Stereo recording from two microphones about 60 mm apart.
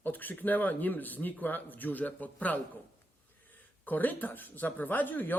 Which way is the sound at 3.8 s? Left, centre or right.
Left.